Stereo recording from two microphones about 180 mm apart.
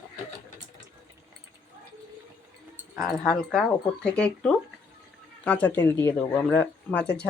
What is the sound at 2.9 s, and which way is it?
Speech, centre (ahead or behind).